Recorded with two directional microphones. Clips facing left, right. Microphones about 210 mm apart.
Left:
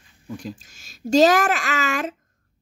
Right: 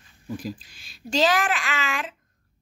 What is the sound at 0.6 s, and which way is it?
Speech, 45° left (ahead or behind).